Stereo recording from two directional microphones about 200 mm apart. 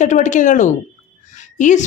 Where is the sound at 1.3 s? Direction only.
35° left (ahead or behind).